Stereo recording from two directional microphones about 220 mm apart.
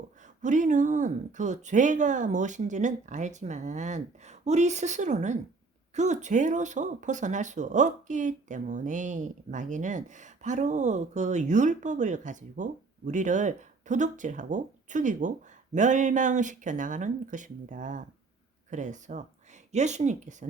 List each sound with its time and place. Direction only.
0.2 s speech: 35° right (ahead or behind)